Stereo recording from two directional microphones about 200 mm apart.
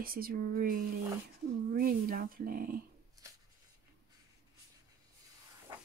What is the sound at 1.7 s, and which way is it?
Speech, 45° right (ahead or behind).